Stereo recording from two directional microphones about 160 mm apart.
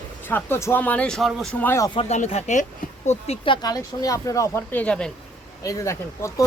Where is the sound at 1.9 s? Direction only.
40° left (ahead or behind).